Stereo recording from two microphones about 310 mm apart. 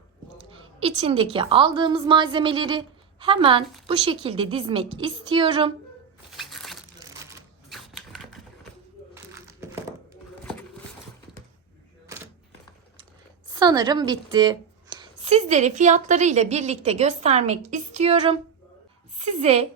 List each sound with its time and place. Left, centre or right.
0.5 s a woman's voice: centre
6.3 s a sound: centre
7.7 s typewriter: centre
9.1 s crumpling: centre
13.5 s a woman's voice: centre